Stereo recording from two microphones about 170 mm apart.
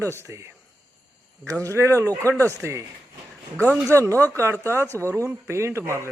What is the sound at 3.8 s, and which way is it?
Speech, 15° right (ahead or behind).